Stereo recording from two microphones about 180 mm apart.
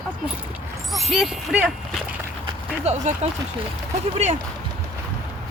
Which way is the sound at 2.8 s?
40° right (ahead or behind).